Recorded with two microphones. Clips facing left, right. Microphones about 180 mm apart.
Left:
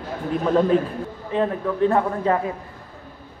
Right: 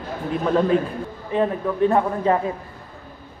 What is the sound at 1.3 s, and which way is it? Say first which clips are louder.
A man's voice: right 1 dB; 15° right (ahead or behind).